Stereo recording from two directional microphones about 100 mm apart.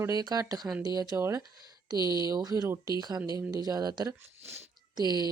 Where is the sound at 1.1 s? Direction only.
30° right (ahead or behind).